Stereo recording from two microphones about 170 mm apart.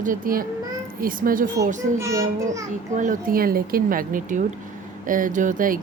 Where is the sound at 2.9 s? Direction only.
50° right (ahead or behind).